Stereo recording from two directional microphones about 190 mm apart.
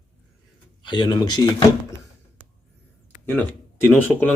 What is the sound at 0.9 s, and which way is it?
Speech, 25° left (ahead or behind).